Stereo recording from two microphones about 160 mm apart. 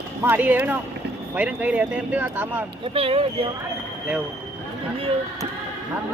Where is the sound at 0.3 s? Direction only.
10° right (ahead or behind).